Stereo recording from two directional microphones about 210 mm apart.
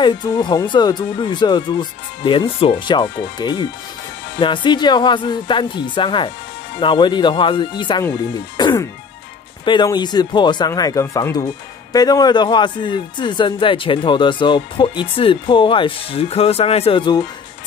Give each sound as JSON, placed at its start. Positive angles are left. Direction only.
{"t": 0.0, "sound": "a man's voice", "side_deg": 20}